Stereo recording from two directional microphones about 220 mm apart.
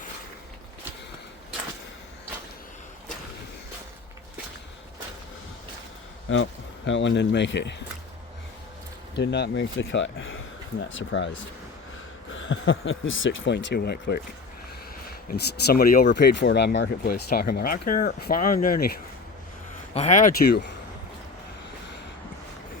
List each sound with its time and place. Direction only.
6.3 s speech: 60° left (ahead or behind)
9.1 s speech: 50° left (ahead or behind)
12.3 s speech: 60° left (ahead or behind)
15.3 s speech: 45° left (ahead or behind)
19.9 s speech: 30° left (ahead or behind)